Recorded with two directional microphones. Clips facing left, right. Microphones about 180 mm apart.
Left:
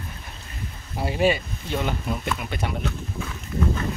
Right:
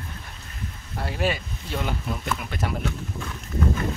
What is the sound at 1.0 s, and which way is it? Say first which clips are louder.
Speech: left 5 dB; centre (ahead or behind).